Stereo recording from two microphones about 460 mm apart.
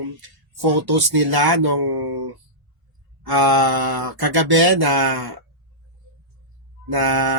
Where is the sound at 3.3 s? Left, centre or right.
Right.